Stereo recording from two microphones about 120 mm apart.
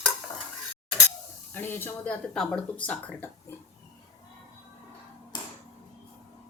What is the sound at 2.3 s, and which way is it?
Speech, 5° left (ahead or behind).